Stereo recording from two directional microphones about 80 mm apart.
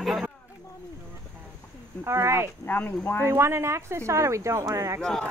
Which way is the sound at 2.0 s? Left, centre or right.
Right.